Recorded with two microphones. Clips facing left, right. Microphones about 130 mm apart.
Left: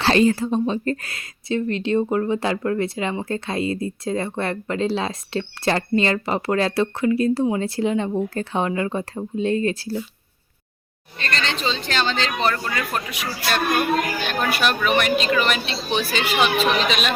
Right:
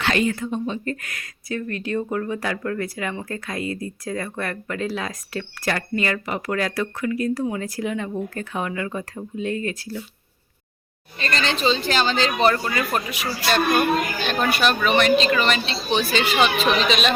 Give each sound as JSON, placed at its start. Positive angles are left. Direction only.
{"t": 0.0, "sound": "a woman's voice", "side_deg": 30}
{"t": 11.2, "sound": "a woman's voice", "side_deg": -5}